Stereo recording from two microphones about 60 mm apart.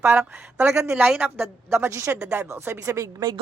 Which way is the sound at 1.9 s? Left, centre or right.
Right.